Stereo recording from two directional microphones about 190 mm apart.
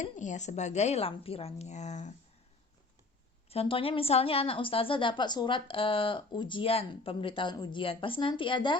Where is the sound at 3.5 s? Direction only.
30° left (ahead or behind).